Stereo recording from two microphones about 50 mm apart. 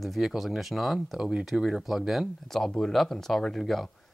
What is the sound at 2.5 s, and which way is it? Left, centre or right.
Speech, centre.